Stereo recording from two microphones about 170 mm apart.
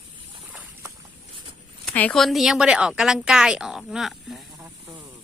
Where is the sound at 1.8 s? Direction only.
5° left (ahead or behind).